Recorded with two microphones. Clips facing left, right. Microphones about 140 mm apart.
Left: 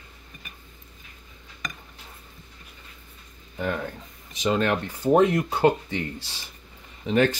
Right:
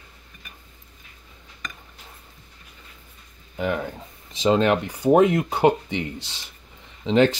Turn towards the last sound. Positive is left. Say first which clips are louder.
# right 3 dB
turn(degrees=-25)  # may be behind; listen again after turning